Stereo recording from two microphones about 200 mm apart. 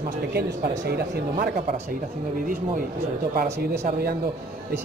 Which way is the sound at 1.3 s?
40° right (ahead or behind).